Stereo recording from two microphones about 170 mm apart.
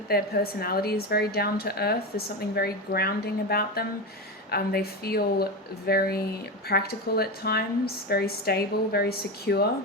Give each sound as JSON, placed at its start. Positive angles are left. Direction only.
{"t": 0.1, "sound": "a woman's voice", "side_deg": 65}